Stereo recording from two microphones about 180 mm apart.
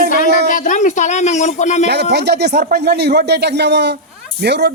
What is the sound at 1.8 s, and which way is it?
Speech, 70° right (ahead or behind).